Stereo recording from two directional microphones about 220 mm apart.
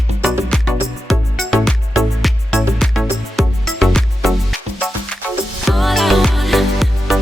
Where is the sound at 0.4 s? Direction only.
Centre (ahead or behind).